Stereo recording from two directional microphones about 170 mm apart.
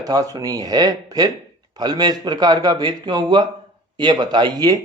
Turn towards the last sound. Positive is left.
turn(degrees=-25)  # may be behind; listen again after turning